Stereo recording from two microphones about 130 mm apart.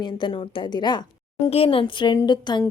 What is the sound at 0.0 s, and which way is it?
A woman's voice, 35° left (ahead or behind).